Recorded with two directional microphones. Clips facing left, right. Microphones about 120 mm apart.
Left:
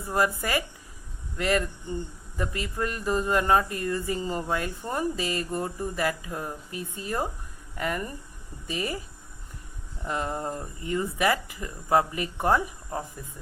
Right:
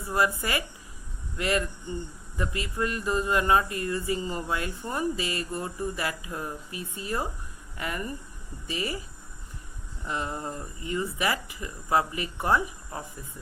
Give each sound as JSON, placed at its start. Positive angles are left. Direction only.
{"t": 0.1, "sound": "speech", "side_deg": 45}
{"t": 10.0, "sound": "speech", "side_deg": 50}